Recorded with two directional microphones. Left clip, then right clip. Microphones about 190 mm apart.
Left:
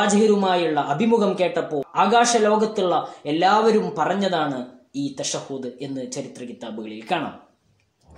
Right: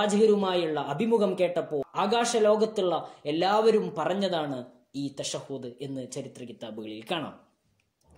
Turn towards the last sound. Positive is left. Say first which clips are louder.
# left 7 dB
turn(degrees=-40)  # may be behind; listen again after turning